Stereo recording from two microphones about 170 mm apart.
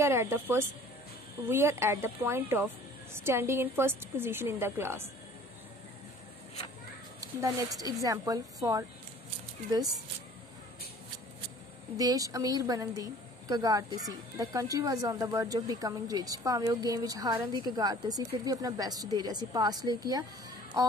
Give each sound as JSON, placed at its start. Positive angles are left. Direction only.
{"t": 0.0, "sound": "speech", "side_deg": -15}
{"t": 7.3, "sound": "a woman's voice", "side_deg": -20}
{"t": 12.0, "sound": "a woman's voice", "side_deg": -20}